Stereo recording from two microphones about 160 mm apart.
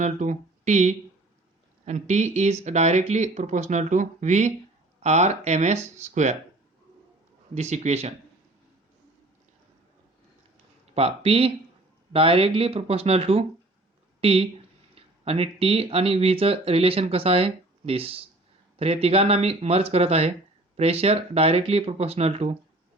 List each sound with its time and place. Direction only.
0.0 s speech: 50° right (ahead or behind)
7.5 s speech: 45° right (ahead or behind)
10.9 s speech: 40° right (ahead or behind)